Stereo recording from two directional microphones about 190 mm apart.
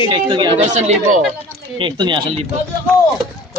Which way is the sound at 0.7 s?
40° right (ahead or behind).